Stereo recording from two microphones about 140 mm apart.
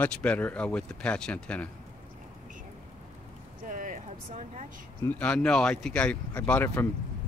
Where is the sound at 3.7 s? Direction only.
70° right (ahead or behind).